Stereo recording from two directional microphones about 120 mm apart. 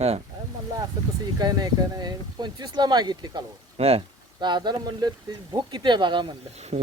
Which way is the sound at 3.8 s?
55° right (ahead or behind).